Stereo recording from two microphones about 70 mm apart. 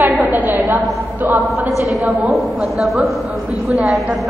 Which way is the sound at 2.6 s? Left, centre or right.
Centre.